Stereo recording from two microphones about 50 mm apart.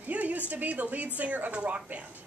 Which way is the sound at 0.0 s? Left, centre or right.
Right.